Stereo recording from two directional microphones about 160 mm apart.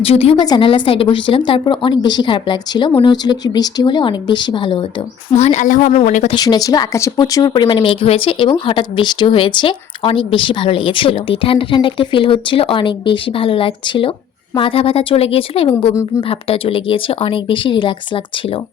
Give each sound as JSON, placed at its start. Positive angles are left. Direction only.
{"t": 0.0, "sound": "speech", "side_deg": 35}
{"t": 5.3, "sound": "speech", "side_deg": 45}
{"t": 6.3, "sound": "speech", "side_deg": 25}